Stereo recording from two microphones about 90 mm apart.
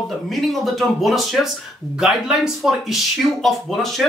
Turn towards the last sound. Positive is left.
turn(degrees=0)  # may be behind; listen again after turning